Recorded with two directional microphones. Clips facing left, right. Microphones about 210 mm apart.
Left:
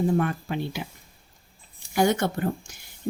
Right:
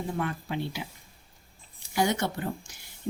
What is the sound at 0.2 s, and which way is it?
Speech, 50° left (ahead or behind).